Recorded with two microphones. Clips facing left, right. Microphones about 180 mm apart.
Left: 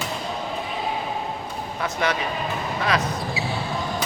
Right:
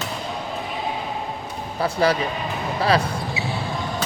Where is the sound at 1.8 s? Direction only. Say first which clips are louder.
Right 5 dB; 30° right (ahead or behind).